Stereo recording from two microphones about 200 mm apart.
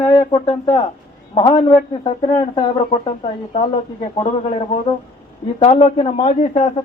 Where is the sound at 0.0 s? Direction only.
25° left (ahead or behind).